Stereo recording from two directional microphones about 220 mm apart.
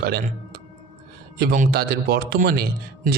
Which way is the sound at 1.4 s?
45° right (ahead or behind).